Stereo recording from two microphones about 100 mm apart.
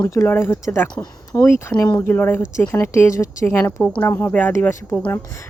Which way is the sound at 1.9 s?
20° left (ahead or behind).